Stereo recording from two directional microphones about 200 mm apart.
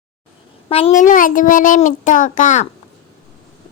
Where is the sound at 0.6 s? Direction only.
30° left (ahead or behind).